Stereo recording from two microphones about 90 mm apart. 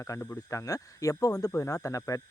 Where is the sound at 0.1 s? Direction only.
40° left (ahead or behind).